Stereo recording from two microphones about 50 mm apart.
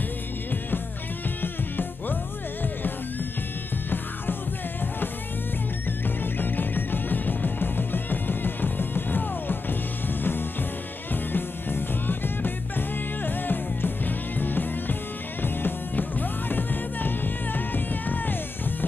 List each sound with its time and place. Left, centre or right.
1.4 s music: left
5.9 s music: left